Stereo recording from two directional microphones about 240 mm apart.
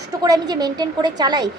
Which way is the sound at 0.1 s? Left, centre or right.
Centre.